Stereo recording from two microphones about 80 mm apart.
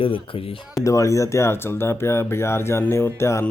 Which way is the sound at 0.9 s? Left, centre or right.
Left.